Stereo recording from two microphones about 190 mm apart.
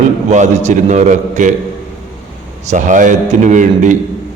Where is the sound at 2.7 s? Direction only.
40° right (ahead or behind).